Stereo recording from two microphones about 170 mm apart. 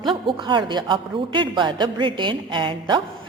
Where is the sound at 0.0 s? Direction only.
30° right (ahead or behind).